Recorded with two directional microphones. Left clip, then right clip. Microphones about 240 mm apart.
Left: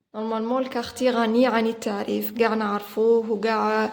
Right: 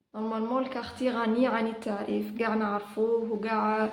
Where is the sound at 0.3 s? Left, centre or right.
Left.